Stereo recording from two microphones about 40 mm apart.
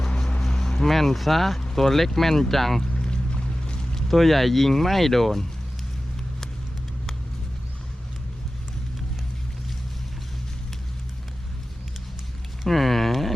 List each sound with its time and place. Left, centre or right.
0.4 s speech: centre
2.8 s boat: left
3.9 s speech: centre
12.6 s a sound: centre